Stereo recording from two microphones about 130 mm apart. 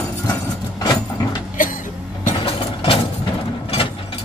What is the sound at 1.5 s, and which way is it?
Music, 90° left.